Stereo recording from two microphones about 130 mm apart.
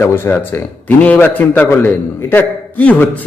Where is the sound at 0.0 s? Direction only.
20° left (ahead or behind).